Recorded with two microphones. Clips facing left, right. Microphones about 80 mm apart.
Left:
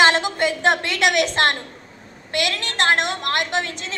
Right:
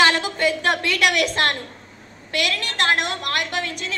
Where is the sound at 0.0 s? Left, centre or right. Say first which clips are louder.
Left 1 dB; left.